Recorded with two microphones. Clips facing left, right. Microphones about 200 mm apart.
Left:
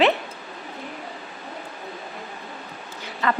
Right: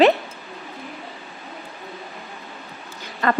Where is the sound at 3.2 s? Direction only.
45° right (ahead or behind).